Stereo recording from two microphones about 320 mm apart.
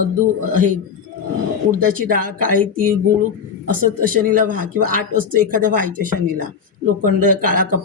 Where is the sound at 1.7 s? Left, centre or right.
Right.